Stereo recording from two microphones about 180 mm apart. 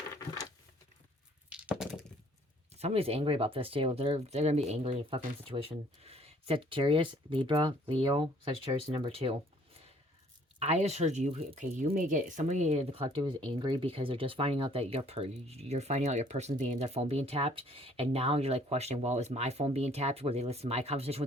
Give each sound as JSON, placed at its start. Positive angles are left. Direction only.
{"t": 1.5, "sound": "a sound", "side_deg": -5}
{"t": 2.7, "sound": "speech", "side_deg": -35}
{"t": 10.6, "sound": "speech", "side_deg": -35}